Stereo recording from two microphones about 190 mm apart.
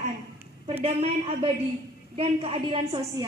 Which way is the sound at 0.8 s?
30° right (ahead or behind).